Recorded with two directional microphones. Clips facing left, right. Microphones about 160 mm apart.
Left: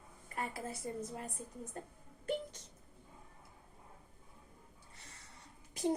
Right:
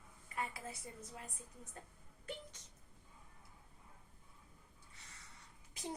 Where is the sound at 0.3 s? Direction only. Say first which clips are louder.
Left 3 dB; 40° left (ahead or behind).